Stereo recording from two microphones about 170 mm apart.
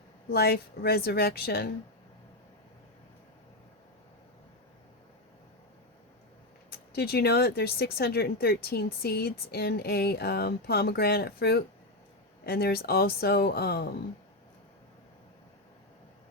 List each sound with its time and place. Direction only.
0.3 s a woman's voice: 65° left (ahead or behind)
6.7 s speech: 65° left (ahead or behind)